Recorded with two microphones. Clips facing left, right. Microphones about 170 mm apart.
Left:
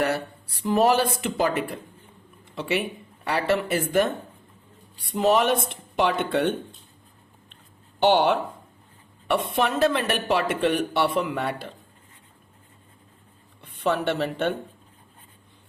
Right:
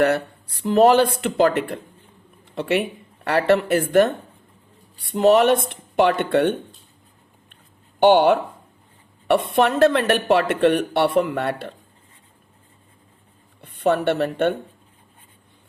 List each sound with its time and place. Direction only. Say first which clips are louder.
0.0 s speech: right 6 dB; 60° right (ahead or behind)
2.4 s a sound: right 5 dB; 60° right (ahead or behind)
3.2 s speech: right 6 dB; 60° right (ahead or behind)
7.5 s a sound: even; 55° right (ahead or behind)
9.2 s speech: right 6 dB; 60° right (ahead or behind)
13.6 s a woman's voice: right 5 dB; 55° right (ahead or behind)